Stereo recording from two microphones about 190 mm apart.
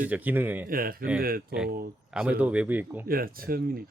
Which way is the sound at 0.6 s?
50° right (ahead or behind).